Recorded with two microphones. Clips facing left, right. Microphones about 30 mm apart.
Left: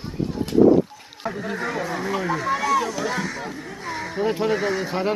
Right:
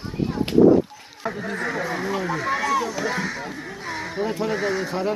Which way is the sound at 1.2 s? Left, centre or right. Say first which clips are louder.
Even; centre.